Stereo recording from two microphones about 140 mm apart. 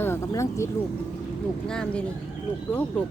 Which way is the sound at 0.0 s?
20° left (ahead or behind).